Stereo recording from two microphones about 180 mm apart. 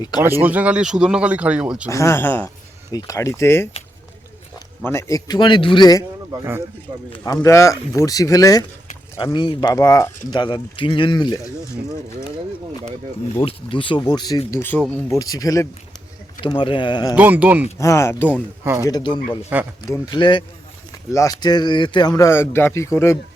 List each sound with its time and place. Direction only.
0.2 s speech: 10° right (ahead or behind)
1.9 s speech: 15° left (ahead or behind)
4.9 s speech: 15° left (ahead or behind)
7.3 s speech: 15° left (ahead or behind)
13.4 s speech: 30° left (ahead or behind)
17.2 s speech: 10° right (ahead or behind)
17.7 s speech: 15° left (ahead or behind)
18.6 s speech: 15° right (ahead or behind)
18.9 s speech: 25° left (ahead or behind)
19.5 s speech: 10° right (ahead or behind)
19.9 s speech: 25° left (ahead or behind)